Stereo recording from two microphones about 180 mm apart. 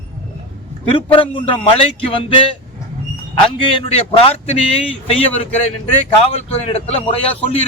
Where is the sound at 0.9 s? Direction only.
30° left (ahead or behind).